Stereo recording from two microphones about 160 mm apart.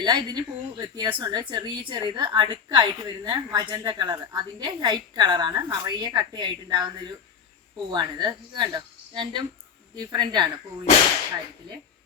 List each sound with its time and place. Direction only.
0.0 s speech: 25° right (ahead or behind)